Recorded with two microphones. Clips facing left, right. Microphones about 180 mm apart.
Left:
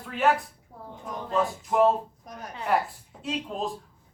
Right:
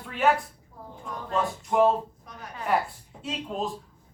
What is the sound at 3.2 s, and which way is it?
Speech, centre (ahead or behind).